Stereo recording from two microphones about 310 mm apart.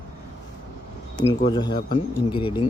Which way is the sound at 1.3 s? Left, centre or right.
Centre.